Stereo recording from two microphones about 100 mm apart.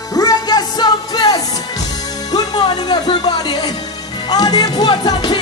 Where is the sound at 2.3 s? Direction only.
45° left (ahead or behind).